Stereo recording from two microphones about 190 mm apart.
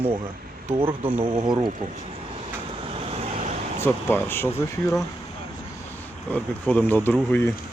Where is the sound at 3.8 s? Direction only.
10° left (ahead or behind).